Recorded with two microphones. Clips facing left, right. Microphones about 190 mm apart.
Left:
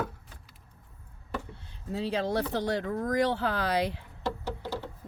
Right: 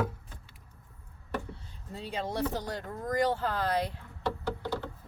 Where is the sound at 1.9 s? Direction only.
75° left (ahead or behind).